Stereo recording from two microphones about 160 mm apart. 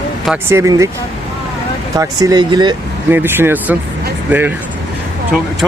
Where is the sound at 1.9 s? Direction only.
20° right (ahead or behind).